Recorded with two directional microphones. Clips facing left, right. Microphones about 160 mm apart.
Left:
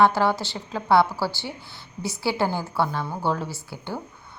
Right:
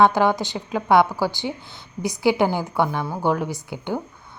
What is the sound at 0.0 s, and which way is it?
A woman's voice, 15° right (ahead or behind).